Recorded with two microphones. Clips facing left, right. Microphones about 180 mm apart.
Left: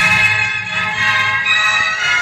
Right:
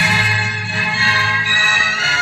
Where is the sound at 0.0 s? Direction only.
30° right (ahead or behind).